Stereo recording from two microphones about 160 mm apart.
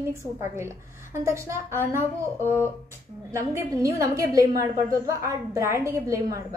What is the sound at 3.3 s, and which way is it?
A woman's voice, 15° right (ahead or behind).